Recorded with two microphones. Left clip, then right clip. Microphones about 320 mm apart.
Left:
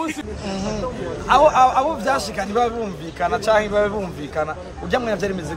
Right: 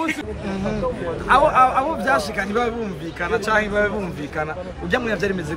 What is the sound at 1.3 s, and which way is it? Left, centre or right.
A man's voice, left.